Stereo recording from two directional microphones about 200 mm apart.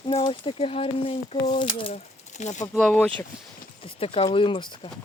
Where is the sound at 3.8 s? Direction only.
30° left (ahead or behind).